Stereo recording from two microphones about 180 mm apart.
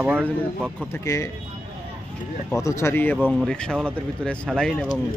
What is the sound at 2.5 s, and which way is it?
Speech, 15° left (ahead or behind).